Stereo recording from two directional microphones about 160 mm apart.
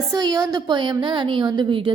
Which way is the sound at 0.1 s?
25° right (ahead or behind).